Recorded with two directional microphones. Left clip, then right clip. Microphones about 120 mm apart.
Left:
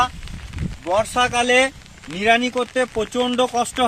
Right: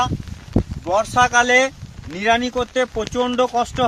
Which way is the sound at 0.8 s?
10° left (ahead or behind).